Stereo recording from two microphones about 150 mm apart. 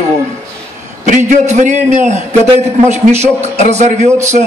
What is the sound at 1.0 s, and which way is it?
Speech, 60° right (ahead or behind).